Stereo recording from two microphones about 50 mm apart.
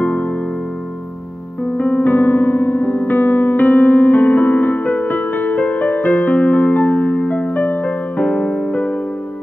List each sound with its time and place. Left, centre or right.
0.0 s music: left
1.8 s music: left
8.7 s music: left